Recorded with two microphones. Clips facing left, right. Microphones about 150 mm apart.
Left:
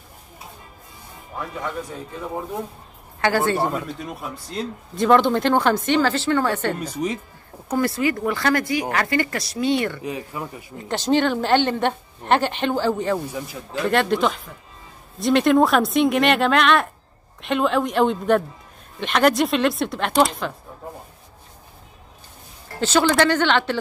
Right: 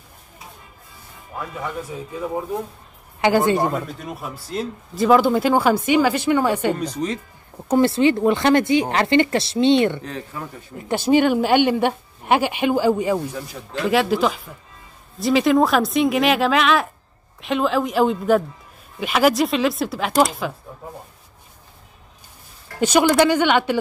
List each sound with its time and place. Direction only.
1.4 s speech: 5° right (ahead or behind)
3.2 s speech: 15° right (ahead or behind)
3.7 s speech: centre (ahead or behind)
6.8 s speech: 10° left (ahead or behind)
7.6 s speech: 25° right (ahead or behind)
10.0 s speech: 10° left (ahead or behind)
10.9 s speech: 10° right (ahead or behind)
13.3 s speech: 5° left (ahead or behind)
22.8 s speech: 15° right (ahead or behind)